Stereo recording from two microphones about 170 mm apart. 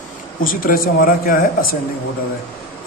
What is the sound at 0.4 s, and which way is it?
Speech, 55° left (ahead or behind).